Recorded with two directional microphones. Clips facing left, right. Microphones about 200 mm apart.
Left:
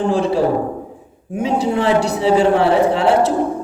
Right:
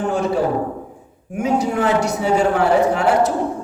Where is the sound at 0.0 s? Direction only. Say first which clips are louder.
Left 3 dB; 30° left (ahead or behind).